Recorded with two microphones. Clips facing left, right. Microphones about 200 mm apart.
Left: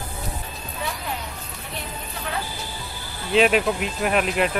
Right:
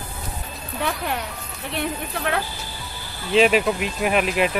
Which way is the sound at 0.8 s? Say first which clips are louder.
Right 5 dB; 70° right (ahead or behind).